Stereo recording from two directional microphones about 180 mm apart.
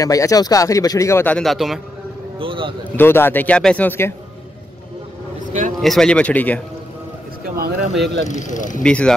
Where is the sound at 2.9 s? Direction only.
10° left (ahead or behind).